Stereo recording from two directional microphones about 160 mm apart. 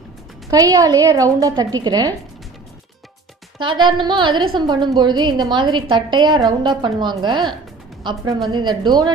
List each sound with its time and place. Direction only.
0.5 s a woman's voice: 20° right (ahead or behind)
3.5 s a woman's voice: 30° right (ahead or behind)